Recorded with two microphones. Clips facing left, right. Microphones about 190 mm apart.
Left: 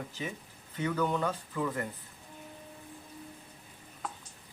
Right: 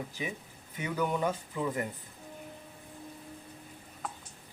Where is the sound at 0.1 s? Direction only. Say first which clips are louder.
Right 1 dB; 15° right (ahead or behind).